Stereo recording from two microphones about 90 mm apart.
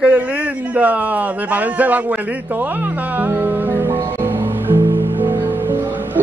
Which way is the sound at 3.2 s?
20° right (ahead or behind).